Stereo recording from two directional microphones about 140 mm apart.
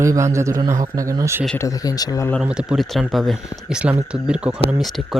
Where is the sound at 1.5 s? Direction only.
25° left (ahead or behind).